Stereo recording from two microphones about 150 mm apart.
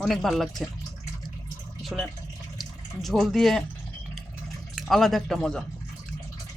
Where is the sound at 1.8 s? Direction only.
Centre (ahead or behind).